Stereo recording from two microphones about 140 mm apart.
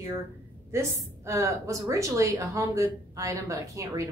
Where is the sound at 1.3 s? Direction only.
20° right (ahead or behind).